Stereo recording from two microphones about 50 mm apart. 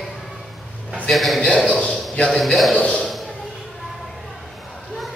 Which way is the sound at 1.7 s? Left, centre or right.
Left.